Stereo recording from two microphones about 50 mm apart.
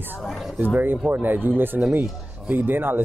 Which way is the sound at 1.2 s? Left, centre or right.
Right.